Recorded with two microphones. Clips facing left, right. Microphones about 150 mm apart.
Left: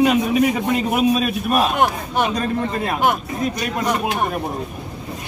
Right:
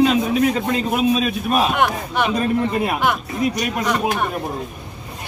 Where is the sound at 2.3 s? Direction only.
10° right (ahead or behind).